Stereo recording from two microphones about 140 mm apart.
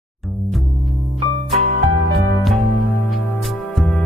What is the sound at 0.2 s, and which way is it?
Music, centre (ahead or behind).